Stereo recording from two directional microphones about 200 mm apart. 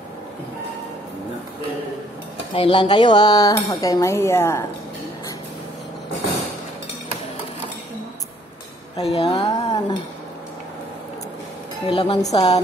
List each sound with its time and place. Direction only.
2.5 s speech: 25° left (ahead or behind)
8.9 s speech: 30° left (ahead or behind)
11.9 s speech: 25° left (ahead or behind)